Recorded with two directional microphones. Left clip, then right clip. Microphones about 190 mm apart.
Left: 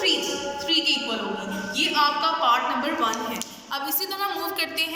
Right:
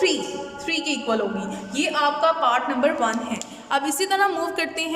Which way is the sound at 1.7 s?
75° right (ahead or behind).